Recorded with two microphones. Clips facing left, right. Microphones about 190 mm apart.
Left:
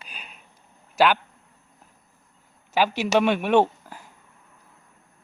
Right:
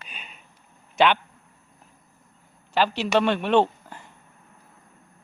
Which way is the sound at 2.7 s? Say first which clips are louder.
Left 1 dB; 10° left (ahead or behind).